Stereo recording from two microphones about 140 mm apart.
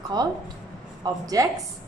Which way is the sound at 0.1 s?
30° right (ahead or behind).